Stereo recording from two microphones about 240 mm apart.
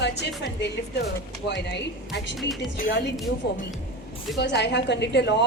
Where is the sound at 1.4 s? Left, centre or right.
Left.